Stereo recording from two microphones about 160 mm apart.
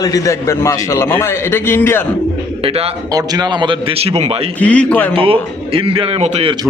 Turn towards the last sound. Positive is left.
turn(degrees=-40)  # may be behind; listen again after turning